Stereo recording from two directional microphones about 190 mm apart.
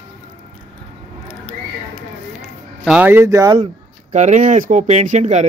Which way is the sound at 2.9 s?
10° right (ahead or behind).